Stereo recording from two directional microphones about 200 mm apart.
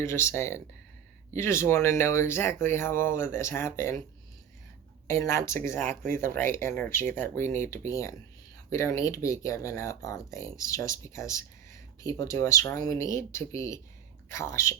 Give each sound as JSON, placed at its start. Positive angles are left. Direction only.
{"t": 0.0, "sound": "speech", "side_deg": 15}
{"t": 5.0, "sound": "speech", "side_deg": 15}